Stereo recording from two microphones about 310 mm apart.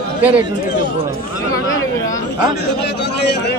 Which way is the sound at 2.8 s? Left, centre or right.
Left.